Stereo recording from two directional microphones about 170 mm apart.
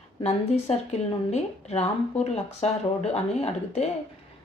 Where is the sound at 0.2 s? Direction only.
40° left (ahead or behind).